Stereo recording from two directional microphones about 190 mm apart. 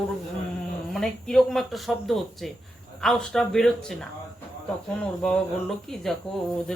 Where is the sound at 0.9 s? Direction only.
Centre (ahead or behind).